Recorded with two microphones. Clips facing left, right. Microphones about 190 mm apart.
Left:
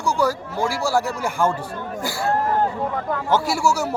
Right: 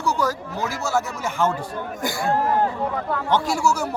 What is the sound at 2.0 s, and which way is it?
Speech, 15° right (ahead or behind).